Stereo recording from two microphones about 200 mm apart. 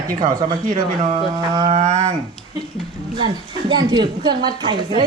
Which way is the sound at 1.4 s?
20° right (ahead or behind).